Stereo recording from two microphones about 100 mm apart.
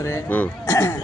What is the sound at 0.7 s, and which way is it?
Speech, 35° left (ahead or behind).